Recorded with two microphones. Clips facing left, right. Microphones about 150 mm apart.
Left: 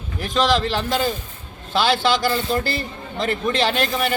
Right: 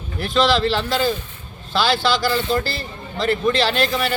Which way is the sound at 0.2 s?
15° left (ahead or behind).